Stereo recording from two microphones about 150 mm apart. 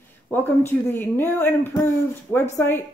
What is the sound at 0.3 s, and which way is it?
A woman's voice, 15° left (ahead or behind).